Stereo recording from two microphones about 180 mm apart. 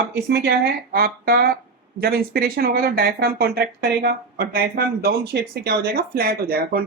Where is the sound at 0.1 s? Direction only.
65° right (ahead or behind).